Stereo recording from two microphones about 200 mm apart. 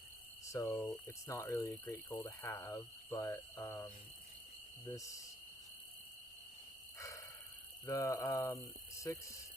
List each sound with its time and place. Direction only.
0.5 s speech: 15° left (ahead or behind)
4.9 s speech: 15° left (ahead or behind)
7.9 s speech: 15° left (ahead or behind)